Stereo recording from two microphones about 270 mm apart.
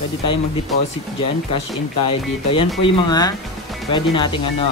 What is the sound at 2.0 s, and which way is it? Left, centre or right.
Speech, centre.